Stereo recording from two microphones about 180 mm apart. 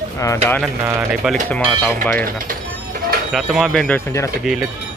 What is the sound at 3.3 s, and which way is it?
Speech, centre (ahead or behind).